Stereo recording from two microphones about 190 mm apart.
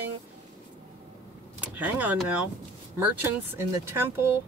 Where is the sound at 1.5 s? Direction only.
10° right (ahead or behind).